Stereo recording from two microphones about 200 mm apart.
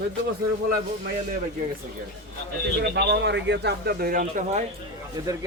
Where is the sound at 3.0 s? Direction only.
60° right (ahead or behind); by 4.7 s 40° right (ahead or behind).